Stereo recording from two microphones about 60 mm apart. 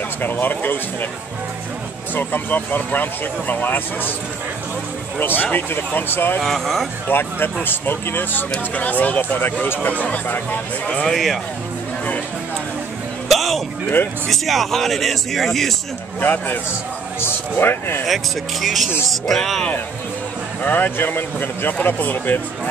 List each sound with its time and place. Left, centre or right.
0.2 s speech: left
2.1 s speech: left
5.2 s speech: left
6.4 s a man's voice: centre
7.1 s speech: left
10.9 s speech: centre
13.3 s a sound: centre
14.3 s a man's voice: centre
16.2 s speech: left
18.0 s a man's voice: centre
20.6 s speech: left